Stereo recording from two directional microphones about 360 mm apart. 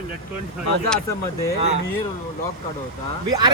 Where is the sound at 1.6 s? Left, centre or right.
Centre.